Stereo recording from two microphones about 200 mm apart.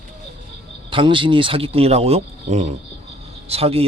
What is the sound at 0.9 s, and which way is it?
Speech, 25° right (ahead or behind).